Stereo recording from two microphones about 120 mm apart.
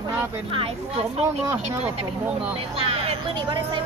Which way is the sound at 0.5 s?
50° right (ahead or behind).